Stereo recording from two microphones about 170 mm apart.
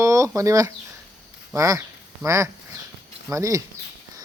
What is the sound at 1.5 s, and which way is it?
Speech, 20° right (ahead or behind).